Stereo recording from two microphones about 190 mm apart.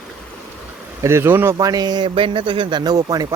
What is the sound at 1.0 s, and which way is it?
Speech, 15° right (ahead or behind).